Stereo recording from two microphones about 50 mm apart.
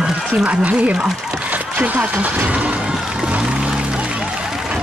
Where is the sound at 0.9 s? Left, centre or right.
Centre.